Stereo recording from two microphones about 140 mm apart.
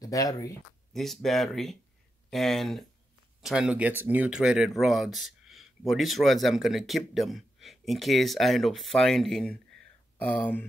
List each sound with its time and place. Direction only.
0.0 s speech: 25° left (ahead or behind)
0.9 s speech: centre (ahead or behind)